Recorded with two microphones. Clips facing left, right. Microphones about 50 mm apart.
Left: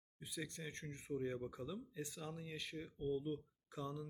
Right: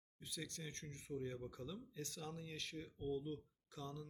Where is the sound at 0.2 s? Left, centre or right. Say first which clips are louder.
Left 3 dB; centre.